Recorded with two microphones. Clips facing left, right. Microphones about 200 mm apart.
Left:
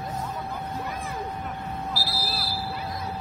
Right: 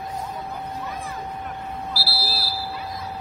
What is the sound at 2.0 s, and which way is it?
Buzzer, 30° right (ahead or behind).